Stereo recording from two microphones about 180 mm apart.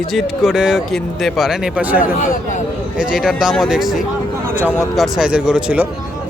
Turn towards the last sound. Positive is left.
turn(degrees=-5)  # may be behind; listen again after turning